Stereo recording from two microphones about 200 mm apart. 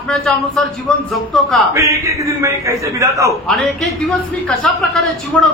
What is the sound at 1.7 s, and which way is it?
A man's voice, 15° right (ahead or behind).